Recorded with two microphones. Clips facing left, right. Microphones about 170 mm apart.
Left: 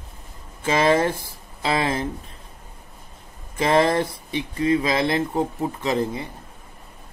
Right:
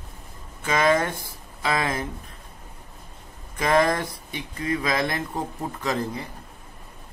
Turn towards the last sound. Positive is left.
turn(degrees=20)  # may be behind; listen again after turning